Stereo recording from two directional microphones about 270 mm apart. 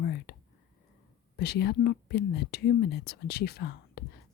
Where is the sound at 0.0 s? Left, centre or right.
Left.